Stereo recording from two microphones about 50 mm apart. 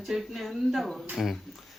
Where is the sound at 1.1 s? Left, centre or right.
Centre.